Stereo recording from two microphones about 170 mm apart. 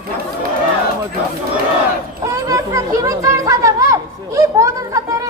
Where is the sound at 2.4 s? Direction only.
20° right (ahead or behind).